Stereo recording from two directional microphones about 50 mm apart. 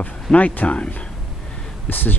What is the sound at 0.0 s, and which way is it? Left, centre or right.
Speech, left.